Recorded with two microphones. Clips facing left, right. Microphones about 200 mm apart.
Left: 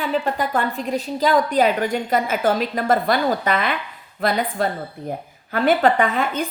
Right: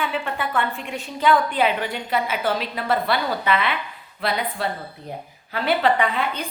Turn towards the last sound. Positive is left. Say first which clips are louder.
# left 2 dB
turn(degrees=45)  # may be behind; listen again after turning